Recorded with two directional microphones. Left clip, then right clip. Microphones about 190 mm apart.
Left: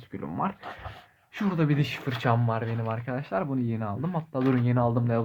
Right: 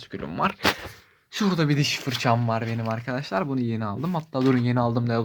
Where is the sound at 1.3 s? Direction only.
30° right (ahead or behind).